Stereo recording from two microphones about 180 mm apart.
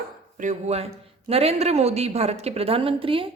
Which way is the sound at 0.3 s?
40° right (ahead or behind).